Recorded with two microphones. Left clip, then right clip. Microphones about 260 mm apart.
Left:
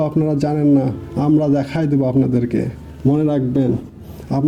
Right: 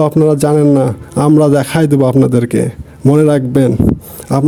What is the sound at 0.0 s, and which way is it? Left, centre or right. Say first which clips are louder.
A man's voice: right 8 dB; right.